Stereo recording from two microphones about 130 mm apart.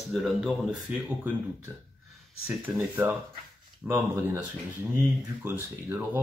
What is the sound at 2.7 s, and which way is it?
Speech, 20° right (ahead or behind).